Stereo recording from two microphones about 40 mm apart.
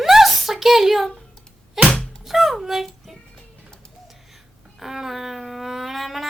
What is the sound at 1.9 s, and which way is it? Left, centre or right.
Thunk, left.